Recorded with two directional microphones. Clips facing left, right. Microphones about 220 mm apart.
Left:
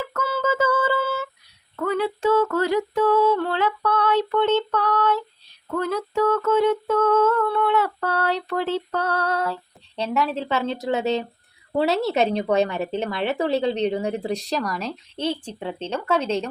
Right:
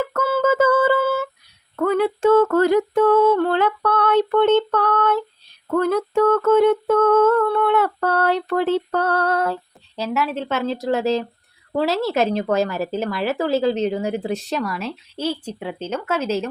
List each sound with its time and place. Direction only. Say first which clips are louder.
0.0 s a sound: right 6 dB; 50° right (ahead or behind)
1.7 s humming: right 5 dB; 50° right (ahead or behind)
9.9 s a woman's voice: right 1 dB; 5° right (ahead or behind)